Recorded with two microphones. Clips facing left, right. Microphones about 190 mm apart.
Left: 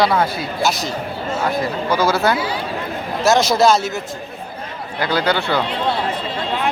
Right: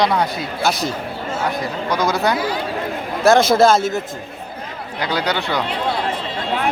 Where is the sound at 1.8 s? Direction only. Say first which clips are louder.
Left 2 dB; 5° left (ahead or behind).